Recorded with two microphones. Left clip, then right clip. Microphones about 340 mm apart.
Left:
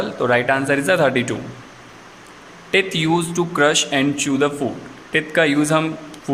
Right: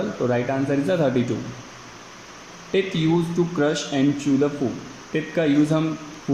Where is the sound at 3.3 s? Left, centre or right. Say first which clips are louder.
Left 6 dB; left.